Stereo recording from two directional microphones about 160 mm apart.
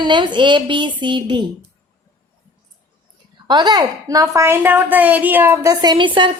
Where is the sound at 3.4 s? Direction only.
30° right (ahead or behind).